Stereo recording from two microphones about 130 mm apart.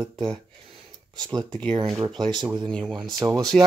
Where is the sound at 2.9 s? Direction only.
35° right (ahead or behind).